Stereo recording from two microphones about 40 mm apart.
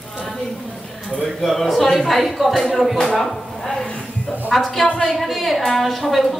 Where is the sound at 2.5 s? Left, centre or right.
Centre.